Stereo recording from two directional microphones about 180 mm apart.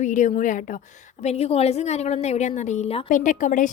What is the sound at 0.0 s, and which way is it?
Speech, 45° left (ahead or behind).